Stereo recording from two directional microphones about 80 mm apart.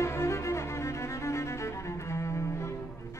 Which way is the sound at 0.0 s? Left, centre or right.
Left.